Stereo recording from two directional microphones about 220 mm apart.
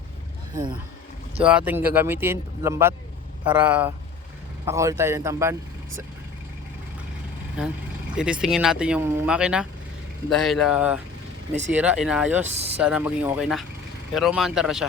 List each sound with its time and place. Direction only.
1.5 s speech: 5° right (ahead or behind)
7.6 s speech: 5° right (ahead or behind)
12.5 s speech: 30° right (ahead or behind)
12.7 s speech: 5° right (ahead or behind)